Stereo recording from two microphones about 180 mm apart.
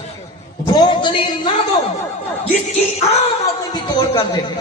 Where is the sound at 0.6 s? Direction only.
25° left (ahead or behind).